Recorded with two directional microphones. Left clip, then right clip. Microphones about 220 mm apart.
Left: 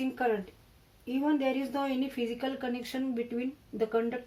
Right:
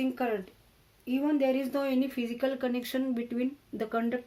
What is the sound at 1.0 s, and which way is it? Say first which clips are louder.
Speech: right 2 dB; 45° right (ahead or behind).